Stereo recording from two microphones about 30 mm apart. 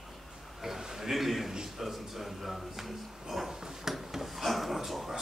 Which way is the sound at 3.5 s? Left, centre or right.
Centre.